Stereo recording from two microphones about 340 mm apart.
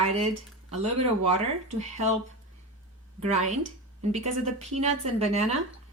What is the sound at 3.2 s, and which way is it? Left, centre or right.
A woman's voice, centre.